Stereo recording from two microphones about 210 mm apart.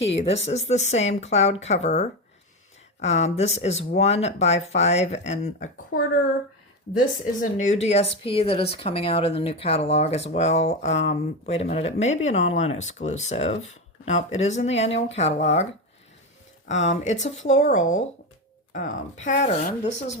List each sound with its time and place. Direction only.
0.0 s speech: 30° left (ahead or behind)
7.5 s speech: 35° left (ahead or behind)
16.6 s speech: 35° left (ahead or behind)
19.1 s speech: 35° left (ahead or behind)